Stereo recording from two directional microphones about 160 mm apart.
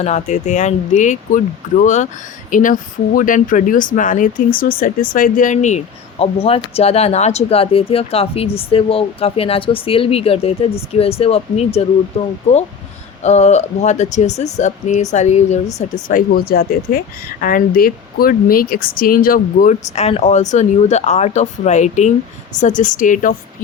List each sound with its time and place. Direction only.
0.0 s speech: 45° left (ahead or behind)
13.2 s speech: 45° left (ahead or behind); by 19.7 s 60° left (ahead or behind)
20.0 s speech: 40° left (ahead or behind)